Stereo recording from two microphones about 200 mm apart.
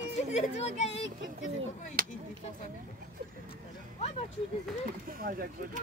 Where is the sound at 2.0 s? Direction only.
45° right (ahead or behind).